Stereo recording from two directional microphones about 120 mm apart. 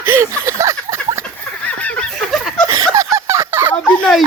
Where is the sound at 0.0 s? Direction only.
20° right (ahead or behind).